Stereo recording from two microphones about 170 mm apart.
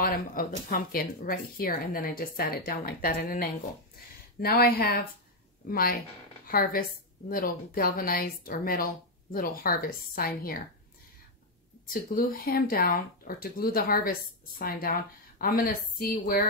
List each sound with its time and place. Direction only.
0.0 s speech: 55° left (ahead or behind)
7.2 s speech: 60° left (ahead or behind)
11.9 s speech: 60° left (ahead or behind)